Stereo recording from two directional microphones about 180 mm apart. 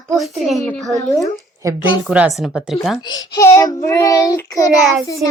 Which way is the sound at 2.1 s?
Centre (ahead or behind).